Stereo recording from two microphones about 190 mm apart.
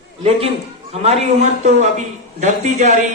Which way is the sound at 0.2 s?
30° right (ahead or behind).